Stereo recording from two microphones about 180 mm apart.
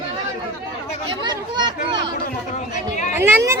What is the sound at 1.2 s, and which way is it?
Chatter, 25° right (ahead or behind).